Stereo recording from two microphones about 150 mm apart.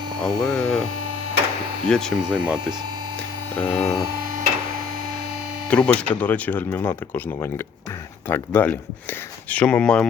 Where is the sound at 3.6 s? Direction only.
10° left (ahead or behind).